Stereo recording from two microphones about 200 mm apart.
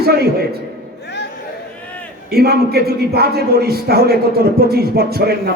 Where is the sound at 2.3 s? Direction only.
50° right (ahead or behind).